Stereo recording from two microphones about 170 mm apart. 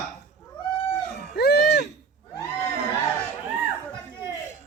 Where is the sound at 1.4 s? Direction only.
70° left (ahead or behind).